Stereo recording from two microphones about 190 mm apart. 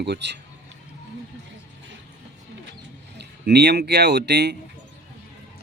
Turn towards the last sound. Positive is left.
turn(degrees=-60)  # may be behind; listen again after turning